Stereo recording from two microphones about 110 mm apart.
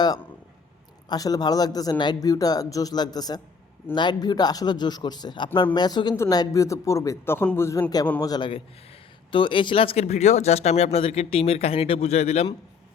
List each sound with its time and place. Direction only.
1.1 s a man's voice: 35° left (ahead or behind)
7.8 s a man's voice: 35° left (ahead or behind)
9.3 s speech: 50° left (ahead or behind); by 12.5 s 70° left (ahead or behind)